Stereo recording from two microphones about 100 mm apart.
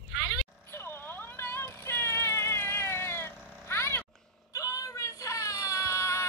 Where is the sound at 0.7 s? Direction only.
20° left (ahead or behind).